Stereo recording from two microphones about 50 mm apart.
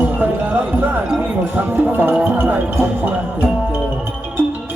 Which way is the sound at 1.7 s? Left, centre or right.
Right.